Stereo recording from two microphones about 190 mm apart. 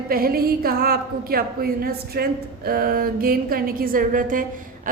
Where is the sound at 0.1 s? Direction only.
50° right (ahead or behind).